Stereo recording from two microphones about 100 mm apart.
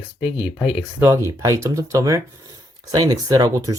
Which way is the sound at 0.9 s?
30° right (ahead or behind).